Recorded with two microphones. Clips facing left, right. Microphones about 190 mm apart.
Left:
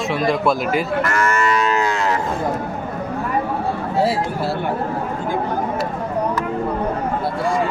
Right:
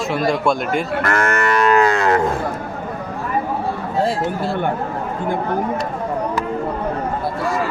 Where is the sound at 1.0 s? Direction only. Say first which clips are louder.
Right 1 dB; 60° right (ahead or behind).